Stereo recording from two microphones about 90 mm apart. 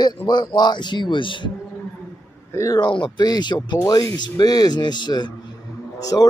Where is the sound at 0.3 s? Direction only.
55° left (ahead or behind).